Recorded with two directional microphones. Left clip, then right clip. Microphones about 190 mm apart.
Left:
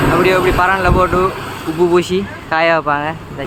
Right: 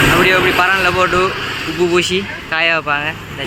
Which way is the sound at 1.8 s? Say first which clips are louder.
Left 1 dB; 20° left (ahead or behind).